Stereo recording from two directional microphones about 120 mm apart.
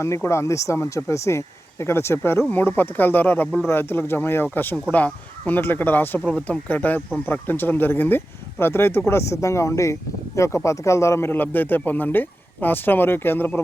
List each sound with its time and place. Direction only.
0.0 s speech: 25° left (ahead or behind)